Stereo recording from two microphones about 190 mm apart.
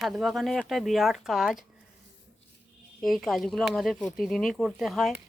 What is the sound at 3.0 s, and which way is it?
Speech, centre (ahead or behind).